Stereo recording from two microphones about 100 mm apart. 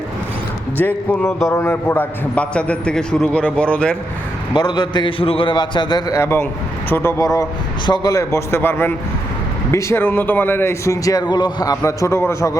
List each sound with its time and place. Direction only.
0.8 s a man's voice: 20° left (ahead or behind)
4.5 s a man's voice: 45° left (ahead or behind)
5.2 s a man's voice: 65° left (ahead or behind)
6.1 s a man's voice: 25° left (ahead or behind)
7.9 s a man's voice: 45° left (ahead or behind)
8.1 s a man's voice: 30° left (ahead or behind)